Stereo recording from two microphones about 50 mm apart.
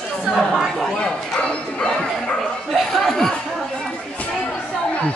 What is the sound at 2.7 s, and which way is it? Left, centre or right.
Speech, centre.